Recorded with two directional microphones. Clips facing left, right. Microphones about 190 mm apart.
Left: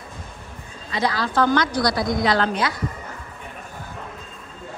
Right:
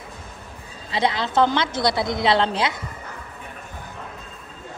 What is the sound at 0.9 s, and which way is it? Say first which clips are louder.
A woman's voice: right 1 dB; 25° right (ahead or behind).